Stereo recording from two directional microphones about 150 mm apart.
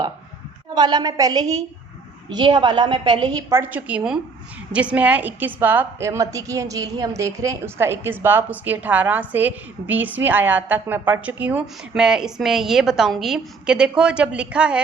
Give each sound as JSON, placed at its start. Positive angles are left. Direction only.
{"t": 0.7, "sound": "a woman's voice", "side_deg": -30}
{"t": 3.2, "sound": "a woman's voice", "side_deg": -20}